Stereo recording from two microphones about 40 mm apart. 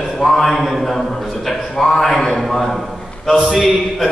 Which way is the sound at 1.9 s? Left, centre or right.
Centre.